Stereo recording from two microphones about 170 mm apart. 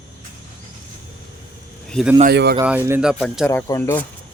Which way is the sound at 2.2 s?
75° right (ahead or behind).